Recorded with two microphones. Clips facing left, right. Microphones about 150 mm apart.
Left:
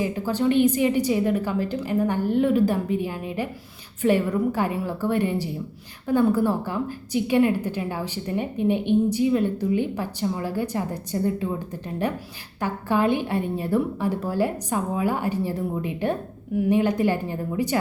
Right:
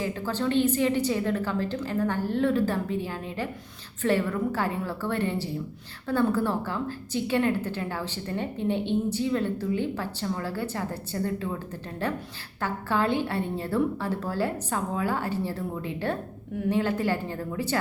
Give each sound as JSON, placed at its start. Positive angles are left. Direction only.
{"t": 0.0, "sound": "a woman's voice", "side_deg": 15}